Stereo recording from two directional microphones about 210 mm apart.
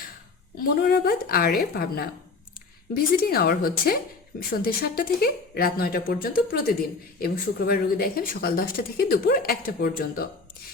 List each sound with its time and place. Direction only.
0.8 s speech: 50° left (ahead or behind)